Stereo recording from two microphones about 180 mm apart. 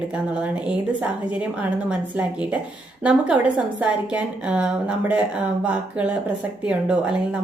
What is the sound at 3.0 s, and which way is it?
A woman's voice, 5° right (ahead or behind).